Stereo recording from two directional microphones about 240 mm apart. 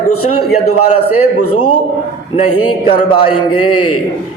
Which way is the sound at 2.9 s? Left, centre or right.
Left.